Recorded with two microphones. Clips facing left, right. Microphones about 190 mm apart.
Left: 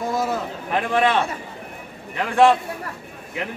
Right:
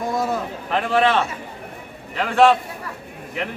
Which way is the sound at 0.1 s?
5° left (ahead or behind).